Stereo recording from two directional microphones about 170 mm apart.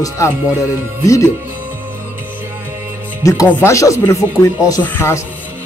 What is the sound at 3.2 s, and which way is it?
Speech, 20° left (ahead or behind).